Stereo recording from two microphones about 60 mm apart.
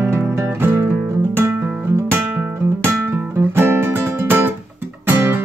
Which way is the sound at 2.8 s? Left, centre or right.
Right.